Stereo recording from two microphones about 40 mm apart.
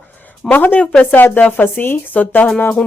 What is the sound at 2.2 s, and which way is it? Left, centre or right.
Speech, left.